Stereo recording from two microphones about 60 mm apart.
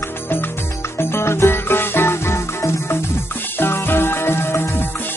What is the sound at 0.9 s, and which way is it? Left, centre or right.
Music, left.